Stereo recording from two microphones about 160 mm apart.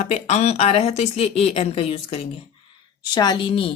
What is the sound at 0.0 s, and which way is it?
A woman's voice, 40° left (ahead or behind).